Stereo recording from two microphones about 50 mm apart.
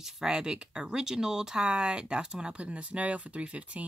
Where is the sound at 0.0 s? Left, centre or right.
Centre.